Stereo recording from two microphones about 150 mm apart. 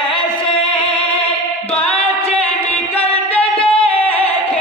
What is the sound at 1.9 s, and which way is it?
Singing, 40° left (ahead or behind).